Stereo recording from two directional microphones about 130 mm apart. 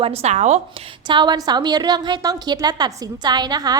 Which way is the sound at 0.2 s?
60° right (ahead or behind).